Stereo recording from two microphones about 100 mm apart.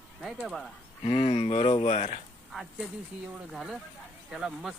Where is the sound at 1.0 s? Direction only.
90° left.